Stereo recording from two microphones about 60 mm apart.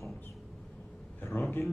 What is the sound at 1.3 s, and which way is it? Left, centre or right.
Speech, left.